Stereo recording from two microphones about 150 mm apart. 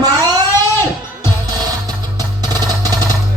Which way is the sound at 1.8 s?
25° right (ahead or behind).